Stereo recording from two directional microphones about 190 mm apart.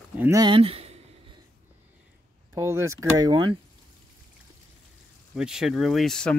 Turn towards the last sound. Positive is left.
turn(degrees=5)  # may be behind; listen again after turning